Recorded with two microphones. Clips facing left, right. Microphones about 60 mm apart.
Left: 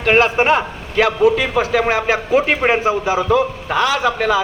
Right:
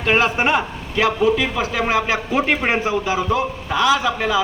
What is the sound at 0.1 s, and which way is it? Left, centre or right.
Speech, left.